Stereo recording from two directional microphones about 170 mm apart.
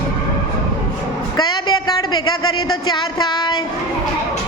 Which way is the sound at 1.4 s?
25° left (ahead or behind).